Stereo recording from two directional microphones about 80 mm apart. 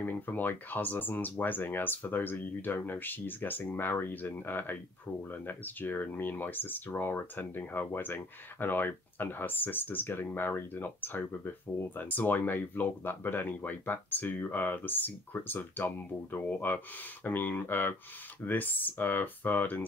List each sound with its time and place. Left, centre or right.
0.0 s speech: left